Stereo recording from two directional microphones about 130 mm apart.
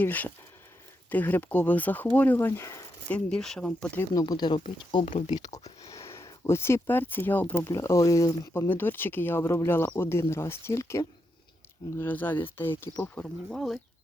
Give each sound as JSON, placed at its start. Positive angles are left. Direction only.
{"t": 0.0, "sound": "speech", "side_deg": 15}
{"t": 3.1, "sound": "speech", "side_deg": 5}
{"t": 4.1, "sound": "speech", "side_deg": 30}
{"t": 5.0, "sound": "speech", "side_deg": 65}
{"t": 5.8, "sound": "speech", "side_deg": 25}